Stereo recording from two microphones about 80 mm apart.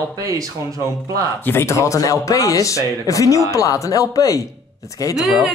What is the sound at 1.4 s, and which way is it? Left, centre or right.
Speech, left.